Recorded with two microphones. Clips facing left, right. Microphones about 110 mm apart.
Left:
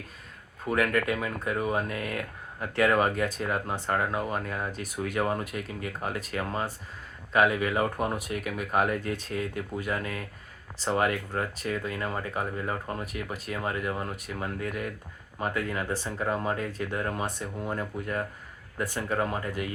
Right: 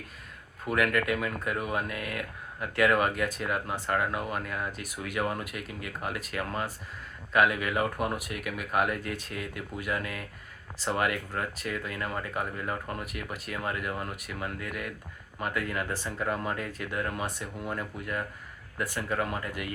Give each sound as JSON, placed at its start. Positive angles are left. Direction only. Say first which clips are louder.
{"t": 0.6, "sound": "speech", "louder": "left 1 dB", "side_deg": 30}